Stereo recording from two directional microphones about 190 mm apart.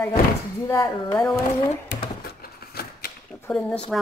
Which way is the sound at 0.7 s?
15° left (ahead or behind).